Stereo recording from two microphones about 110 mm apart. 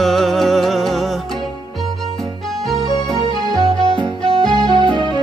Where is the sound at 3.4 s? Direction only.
45° left (ahead or behind).